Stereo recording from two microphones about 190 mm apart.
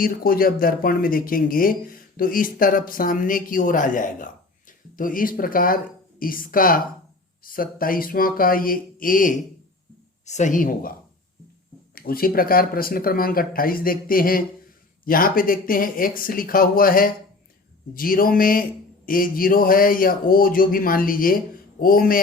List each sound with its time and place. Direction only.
0.0 s speech: 50° left (ahead or behind)
11.9 s speech: 50° left (ahead or behind)